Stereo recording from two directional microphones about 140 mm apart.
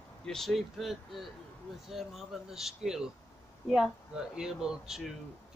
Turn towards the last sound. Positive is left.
turn(degrees=-5)  # may be behind; listen again after turning